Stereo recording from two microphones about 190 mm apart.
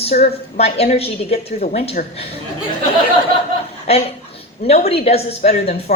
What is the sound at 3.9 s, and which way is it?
A woman's voice, 30° left (ahead or behind).